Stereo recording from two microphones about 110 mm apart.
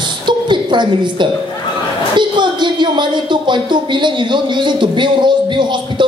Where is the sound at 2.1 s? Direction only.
45° right (ahead or behind).